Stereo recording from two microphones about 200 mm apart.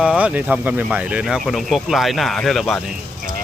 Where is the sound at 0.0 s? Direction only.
5° right (ahead or behind).